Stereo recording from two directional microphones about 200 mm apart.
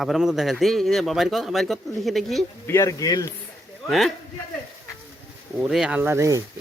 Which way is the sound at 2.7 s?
15° left (ahead or behind).